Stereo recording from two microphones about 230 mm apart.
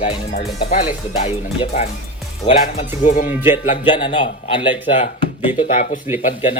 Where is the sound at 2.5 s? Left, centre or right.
Left.